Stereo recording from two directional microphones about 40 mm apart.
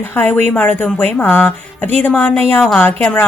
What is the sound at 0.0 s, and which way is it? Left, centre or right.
A woman's voice, left.